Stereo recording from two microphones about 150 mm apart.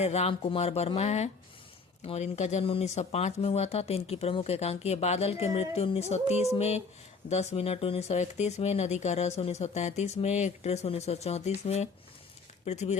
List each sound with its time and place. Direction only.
0.0 s speech: 45° left (ahead or behind)